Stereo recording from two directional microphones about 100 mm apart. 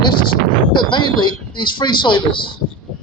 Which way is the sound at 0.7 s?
50° left (ahead or behind).